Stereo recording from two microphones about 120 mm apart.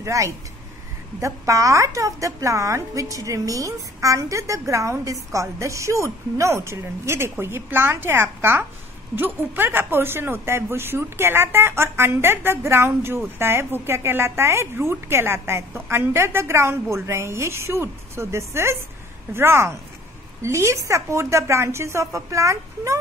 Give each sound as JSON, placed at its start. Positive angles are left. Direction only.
{"t": 0.0, "sound": "a woman's voice", "side_deg": -25}